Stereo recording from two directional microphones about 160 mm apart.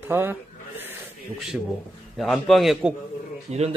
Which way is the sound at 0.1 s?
15° right (ahead or behind).